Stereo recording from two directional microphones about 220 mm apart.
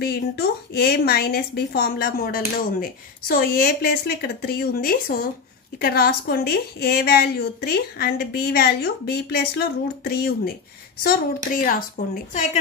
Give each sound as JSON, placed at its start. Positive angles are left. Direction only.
{"t": 0.0, "sound": "a woman's voice", "side_deg": 45}
{"t": 11.5, "sound": "a woman's voice", "side_deg": 40}